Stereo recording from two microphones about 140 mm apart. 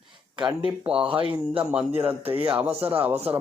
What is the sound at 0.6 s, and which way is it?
Speech, 40° right (ahead or behind).